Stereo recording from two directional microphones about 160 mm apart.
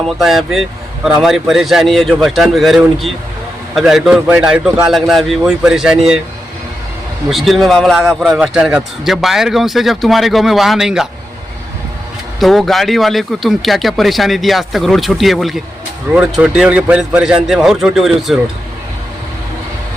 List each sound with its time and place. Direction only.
0.0 s speech: centre (ahead or behind)
7.3 s speech: centre (ahead or behind)
12.4 s speech: centre (ahead or behind)